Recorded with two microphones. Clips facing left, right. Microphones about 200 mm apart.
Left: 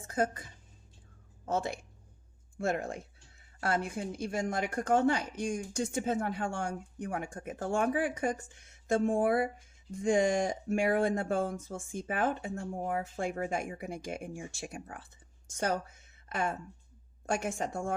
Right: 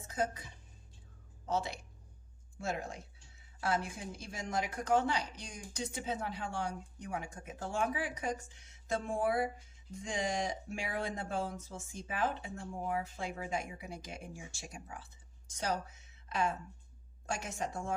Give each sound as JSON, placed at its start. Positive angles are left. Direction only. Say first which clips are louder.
{"t": 0.1, "sound": "speech", "louder": "left 4 dB", "side_deg": 55}
{"t": 1.5, "sound": "a woman's voice", "louder": "left 3 dB", "side_deg": 50}